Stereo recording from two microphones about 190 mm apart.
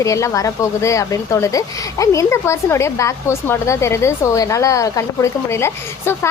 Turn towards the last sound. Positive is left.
turn(degrees=15)  # may be behind; listen again after turning